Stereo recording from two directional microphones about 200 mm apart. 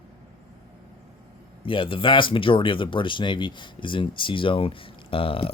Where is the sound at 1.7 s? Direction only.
25° left (ahead or behind).